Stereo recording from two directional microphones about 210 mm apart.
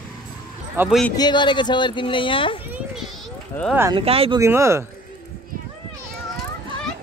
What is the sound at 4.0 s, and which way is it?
Speech, 25° right (ahead or behind).